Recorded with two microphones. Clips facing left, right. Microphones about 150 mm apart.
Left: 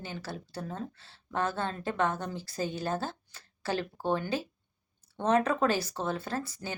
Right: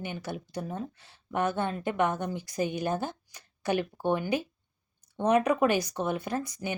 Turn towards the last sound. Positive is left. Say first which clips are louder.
# right 3 dB
turn(degrees=-15)  # may be behind; listen again after turning